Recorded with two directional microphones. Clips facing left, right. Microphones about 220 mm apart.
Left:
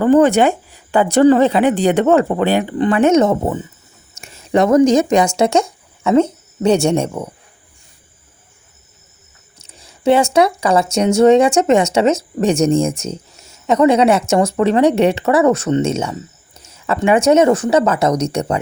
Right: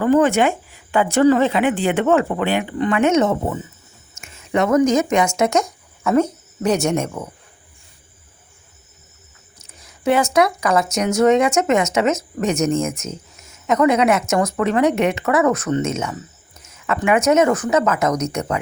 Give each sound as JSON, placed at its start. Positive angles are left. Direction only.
{"t": 0.0, "sound": "speech", "side_deg": 35}
{"t": 9.6, "sound": "speech", "side_deg": 30}